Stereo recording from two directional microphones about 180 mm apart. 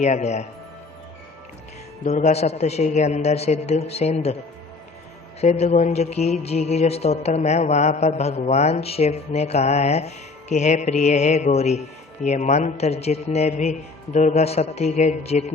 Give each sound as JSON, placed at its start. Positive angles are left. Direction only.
{"t": 0.0, "sound": "speech", "side_deg": 40}
{"t": 2.0, "sound": "speech", "side_deg": 40}
{"t": 5.4, "sound": "speech", "side_deg": 35}